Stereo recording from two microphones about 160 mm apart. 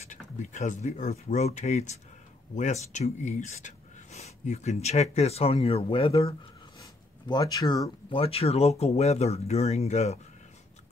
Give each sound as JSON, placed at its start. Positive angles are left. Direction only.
{"t": 0.1, "sound": "speech", "side_deg": 50}
{"t": 6.8, "sound": "a sound", "side_deg": 25}
{"t": 8.2, "sound": "speech", "side_deg": 40}